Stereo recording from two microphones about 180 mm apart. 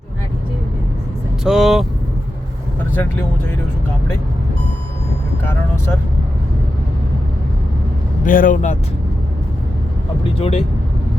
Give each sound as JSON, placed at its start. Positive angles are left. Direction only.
{"t": 1.5, "sound": "speech", "side_deg": 0}
{"t": 5.5, "sound": "speech", "side_deg": 15}
{"t": 8.2, "sound": "speech", "side_deg": 50}
{"t": 10.2, "sound": "speech", "side_deg": 35}